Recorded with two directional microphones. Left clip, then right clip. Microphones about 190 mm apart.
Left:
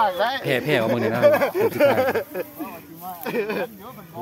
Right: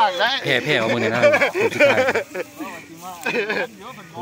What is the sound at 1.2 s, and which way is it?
Speech, 55° left (ahead or behind).